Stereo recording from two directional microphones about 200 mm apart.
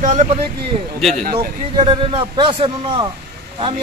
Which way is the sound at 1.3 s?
30° right (ahead or behind).